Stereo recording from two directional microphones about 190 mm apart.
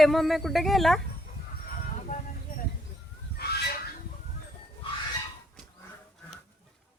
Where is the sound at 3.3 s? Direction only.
60° left (ahead or behind).